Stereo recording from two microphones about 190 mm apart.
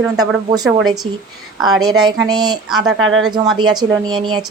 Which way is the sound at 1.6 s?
20° right (ahead or behind).